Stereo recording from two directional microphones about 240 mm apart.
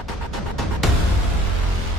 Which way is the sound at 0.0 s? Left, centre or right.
Centre.